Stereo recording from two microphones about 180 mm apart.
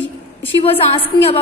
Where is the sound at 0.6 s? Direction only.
30° left (ahead or behind).